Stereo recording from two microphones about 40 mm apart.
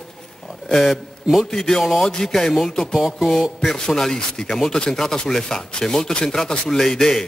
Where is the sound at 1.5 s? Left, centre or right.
Centre.